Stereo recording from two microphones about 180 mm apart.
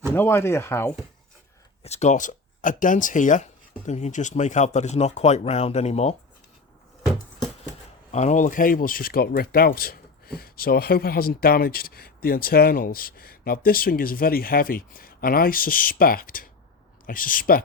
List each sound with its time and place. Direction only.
0.1 s speech: 15° left (ahead or behind)
1.8 s speech: 40° left (ahead or behind)
8.1 s speech: 40° left (ahead or behind)